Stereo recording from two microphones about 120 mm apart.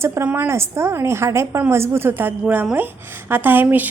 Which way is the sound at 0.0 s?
20° right (ahead or behind).